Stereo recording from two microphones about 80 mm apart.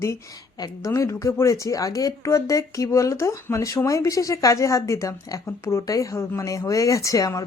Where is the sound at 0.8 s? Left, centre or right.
Left.